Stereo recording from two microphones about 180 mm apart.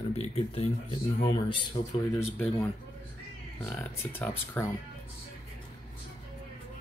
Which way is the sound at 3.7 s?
15° left (ahead or behind).